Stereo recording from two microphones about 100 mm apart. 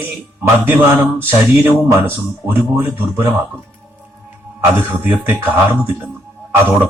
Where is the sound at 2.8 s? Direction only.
20° right (ahead or behind).